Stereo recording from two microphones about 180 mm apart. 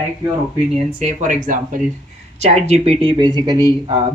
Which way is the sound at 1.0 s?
40° right (ahead or behind).